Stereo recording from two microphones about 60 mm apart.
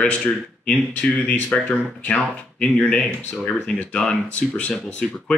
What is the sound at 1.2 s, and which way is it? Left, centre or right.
Speech, left.